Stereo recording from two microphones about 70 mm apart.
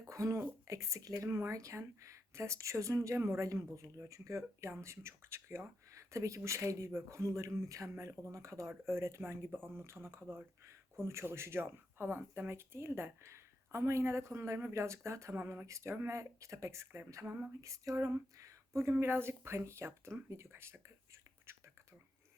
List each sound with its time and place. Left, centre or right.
0.0 s speech: right
21.5 s whispering: right